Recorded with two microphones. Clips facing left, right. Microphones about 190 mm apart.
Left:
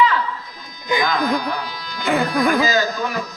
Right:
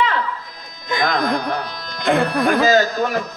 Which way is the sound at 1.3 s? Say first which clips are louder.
Even; 55° right (ahead or behind).